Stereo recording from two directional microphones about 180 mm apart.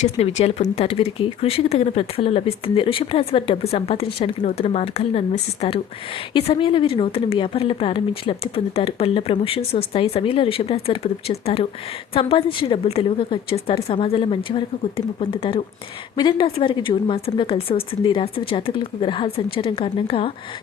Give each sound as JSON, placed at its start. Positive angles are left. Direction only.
{"t": 0.0, "sound": "a woman's voice", "side_deg": 35}